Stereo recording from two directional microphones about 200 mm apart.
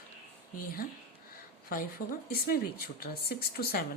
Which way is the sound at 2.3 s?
45° left (ahead or behind).